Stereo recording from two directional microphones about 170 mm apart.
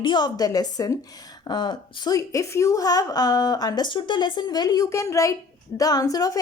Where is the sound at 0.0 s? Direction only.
25° left (ahead or behind).